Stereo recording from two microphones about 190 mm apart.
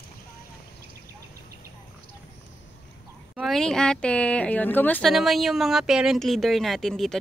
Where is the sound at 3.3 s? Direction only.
Centre (ahead or behind).